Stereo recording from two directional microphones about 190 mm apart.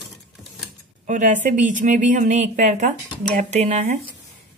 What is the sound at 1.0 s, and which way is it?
Speech, 40° right (ahead or behind).